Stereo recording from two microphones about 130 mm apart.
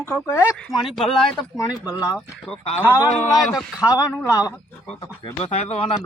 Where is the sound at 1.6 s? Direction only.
30° left (ahead or behind).